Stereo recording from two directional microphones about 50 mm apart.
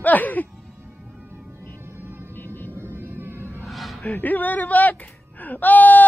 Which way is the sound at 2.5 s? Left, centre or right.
Left.